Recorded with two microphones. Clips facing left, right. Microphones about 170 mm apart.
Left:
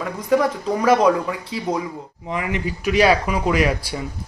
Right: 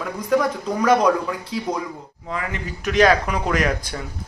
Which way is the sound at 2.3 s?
15° left (ahead or behind).